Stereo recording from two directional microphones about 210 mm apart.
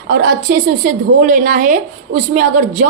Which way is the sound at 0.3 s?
45° right (ahead or behind).